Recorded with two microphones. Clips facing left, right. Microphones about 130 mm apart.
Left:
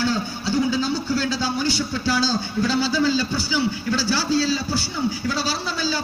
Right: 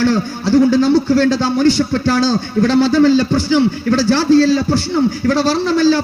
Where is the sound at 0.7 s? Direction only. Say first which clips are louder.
Right 11 dB; 75° right (ahead or behind).